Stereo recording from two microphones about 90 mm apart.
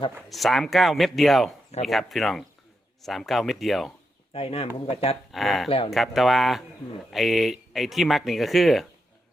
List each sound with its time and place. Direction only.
0.3 s a man's voice: centre (ahead or behind)
4.3 s speech: 90° left
5.3 s a man's voice: centre (ahead or behind)
5.6 s speech: 90° left
5.9 s a man's voice: centre (ahead or behind)